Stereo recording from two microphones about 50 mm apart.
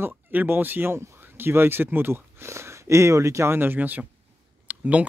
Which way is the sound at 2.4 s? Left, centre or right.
Right.